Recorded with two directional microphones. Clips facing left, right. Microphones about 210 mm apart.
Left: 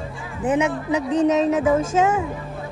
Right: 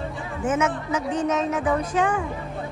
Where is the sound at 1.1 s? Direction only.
35° left (ahead or behind).